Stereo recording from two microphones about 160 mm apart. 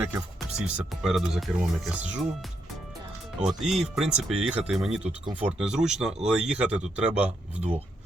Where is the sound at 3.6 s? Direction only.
Centre (ahead or behind).